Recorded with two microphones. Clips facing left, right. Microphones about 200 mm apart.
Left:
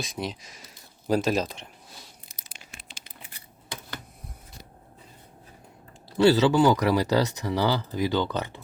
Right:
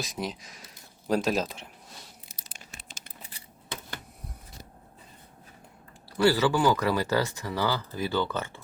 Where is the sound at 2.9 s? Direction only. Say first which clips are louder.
Even; 45° right (ahead or behind).